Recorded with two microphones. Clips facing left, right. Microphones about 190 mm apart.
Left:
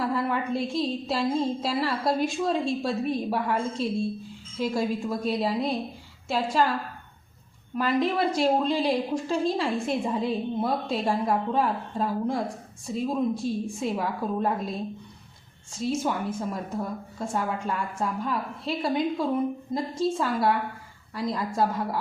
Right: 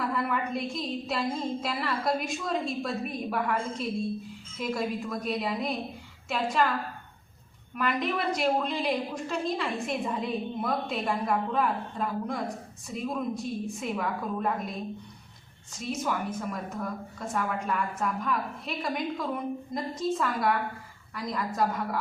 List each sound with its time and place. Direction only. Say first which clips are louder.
0.0 s a woman's voice: left 3 dB; 30° left (ahead or behind)
7.8 s a woman's voice: left 5 dB; 30° left (ahead or behind)
15.8 s a woman's voice: left 4 dB; 30° left (ahead or behind)